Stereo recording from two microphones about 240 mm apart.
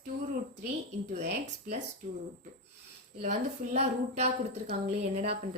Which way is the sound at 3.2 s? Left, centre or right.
Right.